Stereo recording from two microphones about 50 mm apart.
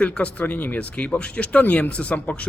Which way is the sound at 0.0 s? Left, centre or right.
Left.